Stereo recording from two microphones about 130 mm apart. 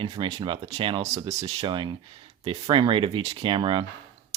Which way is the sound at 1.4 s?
40° right (ahead or behind).